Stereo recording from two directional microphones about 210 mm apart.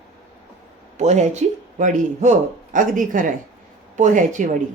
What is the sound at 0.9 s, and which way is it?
A woman's voice, 35° right (ahead or behind).